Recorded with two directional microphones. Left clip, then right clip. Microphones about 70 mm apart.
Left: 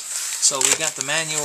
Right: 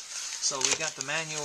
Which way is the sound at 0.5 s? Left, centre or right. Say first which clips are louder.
Left 8 dB; centre.